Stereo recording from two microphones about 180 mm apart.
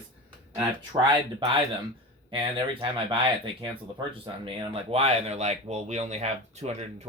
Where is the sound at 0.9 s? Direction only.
20° right (ahead or behind).